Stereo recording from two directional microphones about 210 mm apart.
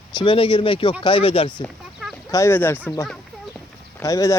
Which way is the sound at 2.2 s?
15° left (ahead or behind).